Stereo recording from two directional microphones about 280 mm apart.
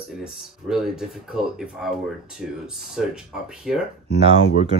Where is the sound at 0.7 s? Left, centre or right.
Centre.